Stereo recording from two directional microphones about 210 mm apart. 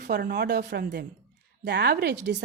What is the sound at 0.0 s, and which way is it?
Speech, 50° right (ahead or behind).